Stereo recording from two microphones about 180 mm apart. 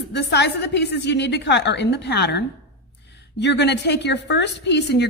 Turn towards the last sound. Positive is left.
turn(degrees=70)  # may be behind; listen again after turning